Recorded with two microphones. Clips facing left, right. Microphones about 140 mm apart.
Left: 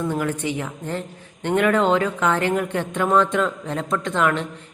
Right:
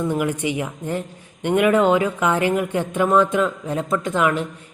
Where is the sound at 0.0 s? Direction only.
15° right (ahead or behind).